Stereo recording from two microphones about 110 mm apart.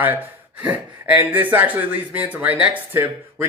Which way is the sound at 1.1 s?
15° right (ahead or behind).